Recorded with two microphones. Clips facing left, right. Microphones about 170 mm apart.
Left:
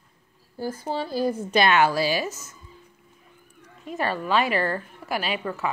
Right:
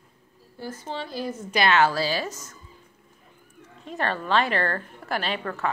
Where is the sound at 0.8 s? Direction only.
40° left (ahead or behind).